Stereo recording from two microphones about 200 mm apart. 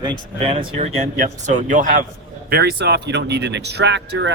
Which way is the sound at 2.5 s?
55° right (ahead or behind).